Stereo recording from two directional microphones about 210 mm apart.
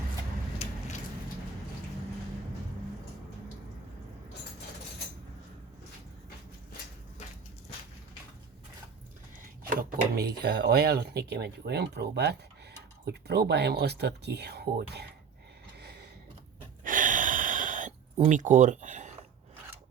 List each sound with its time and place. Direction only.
10.2 s speech: 50° right (ahead or behind)
16.8 s gasp: 40° right (ahead or behind)
18.2 s speech: 35° right (ahead or behind)